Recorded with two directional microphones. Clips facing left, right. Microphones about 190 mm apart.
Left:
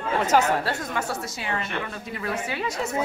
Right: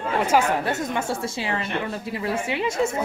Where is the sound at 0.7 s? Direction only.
25° right (ahead or behind).